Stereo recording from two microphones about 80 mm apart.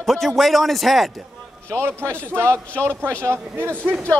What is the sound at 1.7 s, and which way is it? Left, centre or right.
Speech, right.